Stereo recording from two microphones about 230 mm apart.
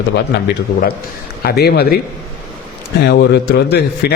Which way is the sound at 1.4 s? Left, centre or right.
Left.